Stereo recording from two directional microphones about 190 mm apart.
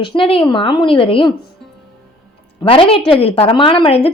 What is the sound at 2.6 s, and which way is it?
A woman's voice, 30° left (ahead or behind).